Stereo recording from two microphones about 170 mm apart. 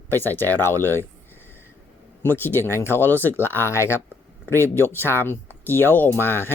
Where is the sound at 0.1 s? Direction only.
10° left (ahead or behind).